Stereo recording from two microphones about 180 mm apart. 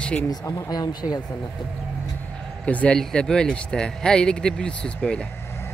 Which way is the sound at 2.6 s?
5° left (ahead or behind).